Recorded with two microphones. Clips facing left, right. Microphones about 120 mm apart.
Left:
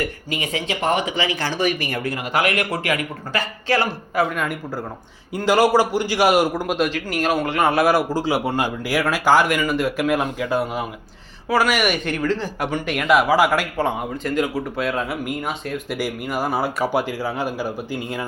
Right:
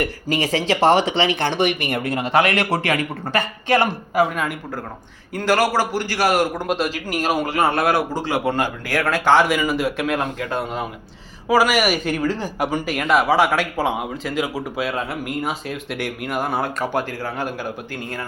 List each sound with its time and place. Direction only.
0.0 s speech: 35° right (ahead or behind)
0.6 s speech: 90° right
1.1 s speech: 25° right (ahead or behind)
3.7 s speech: 15° right (ahead or behind)
5.3 s a man's voice: 15° left (ahead or behind)
6.7 s a man's voice: centre (ahead or behind)
11.4 s speech: 5° right (ahead or behind); by 18.3 s 10° left (ahead or behind)